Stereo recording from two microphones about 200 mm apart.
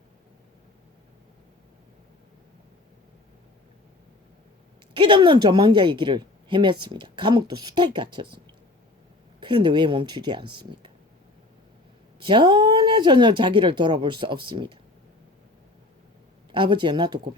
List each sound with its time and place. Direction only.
4.9 s speech: 25° right (ahead or behind)
9.4 s speech: 25° right (ahead or behind)
12.2 s speech: 25° right (ahead or behind)
16.5 s speech: 25° right (ahead or behind)